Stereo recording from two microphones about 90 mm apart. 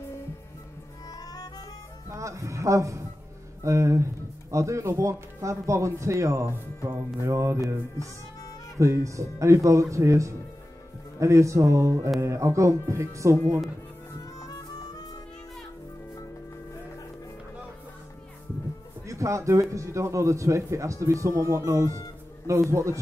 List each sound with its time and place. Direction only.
1.0 s music: 45° left (ahead or behind)
2.0 s speech: 35° right (ahead or behind)
8.7 s speech: 35° right (ahead or behind)
14.2 s music: 45° left (ahead or behind)
19.0 s speech: 35° right (ahead or behind)